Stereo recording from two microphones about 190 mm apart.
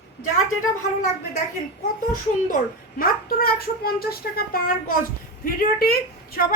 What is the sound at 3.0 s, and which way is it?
A woman's voice, 50° left (ahead or behind).